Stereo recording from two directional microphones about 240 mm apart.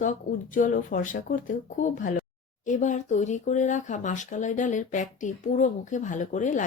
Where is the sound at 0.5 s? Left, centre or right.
Left.